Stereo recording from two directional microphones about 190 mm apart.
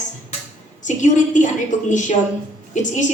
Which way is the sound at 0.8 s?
40° left (ahead or behind).